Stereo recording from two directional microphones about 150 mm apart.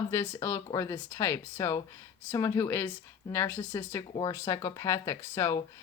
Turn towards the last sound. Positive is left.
turn(degrees=15)  # may be behind; listen again after turning